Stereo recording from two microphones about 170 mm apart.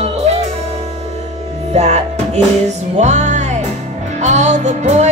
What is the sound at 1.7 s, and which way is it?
Music, 40° right (ahead or behind).